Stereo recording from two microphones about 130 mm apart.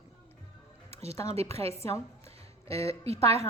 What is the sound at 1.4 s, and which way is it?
Speech, 50° right (ahead or behind).